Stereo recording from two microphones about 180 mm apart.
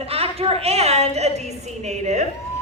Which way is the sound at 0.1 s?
35° right (ahead or behind).